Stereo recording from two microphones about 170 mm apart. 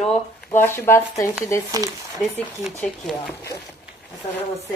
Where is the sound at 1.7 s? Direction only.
20° right (ahead or behind).